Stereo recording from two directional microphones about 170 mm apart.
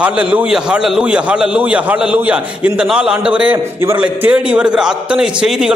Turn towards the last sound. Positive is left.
turn(degrees=-5)  # may be behind; listen again after turning